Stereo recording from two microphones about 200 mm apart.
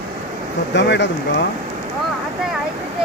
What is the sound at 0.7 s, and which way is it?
Speech, 60° left (ahead or behind).